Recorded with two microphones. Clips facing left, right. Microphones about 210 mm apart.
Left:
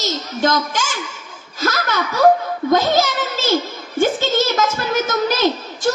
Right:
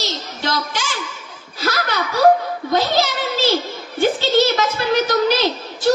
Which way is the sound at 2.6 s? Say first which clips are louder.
Left 3 dB; 45° left (ahead or behind).